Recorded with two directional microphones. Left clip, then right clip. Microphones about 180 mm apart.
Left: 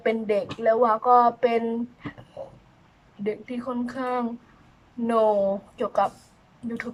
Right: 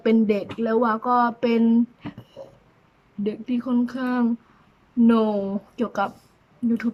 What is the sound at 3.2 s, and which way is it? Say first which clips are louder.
Speech: right 2 dB; 15° right (ahead or behind).